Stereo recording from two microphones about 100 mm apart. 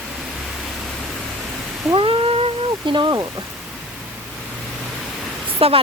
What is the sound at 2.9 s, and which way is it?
Speech, 50° right (ahead or behind).